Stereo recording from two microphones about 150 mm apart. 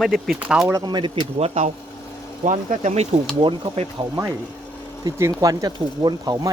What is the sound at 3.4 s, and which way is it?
Speech, 30° right (ahead or behind).